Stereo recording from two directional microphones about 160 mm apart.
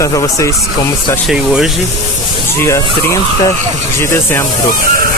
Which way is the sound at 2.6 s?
20° left (ahead or behind).